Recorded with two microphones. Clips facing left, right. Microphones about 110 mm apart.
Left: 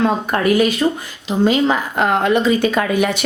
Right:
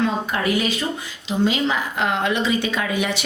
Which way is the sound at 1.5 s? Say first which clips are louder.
Left 8 dB; 45° left (ahead or behind).